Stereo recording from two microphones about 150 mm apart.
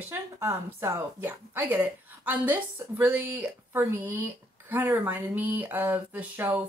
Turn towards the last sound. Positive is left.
turn(degrees=-15)  # may be behind; listen again after turning